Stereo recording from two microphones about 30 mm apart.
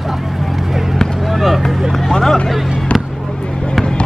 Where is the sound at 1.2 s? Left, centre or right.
Centre.